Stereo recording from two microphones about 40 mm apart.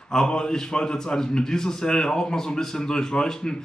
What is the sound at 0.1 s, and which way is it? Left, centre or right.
A man's voice, centre.